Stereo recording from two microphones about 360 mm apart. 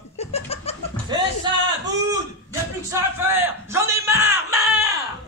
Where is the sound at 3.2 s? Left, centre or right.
Centre.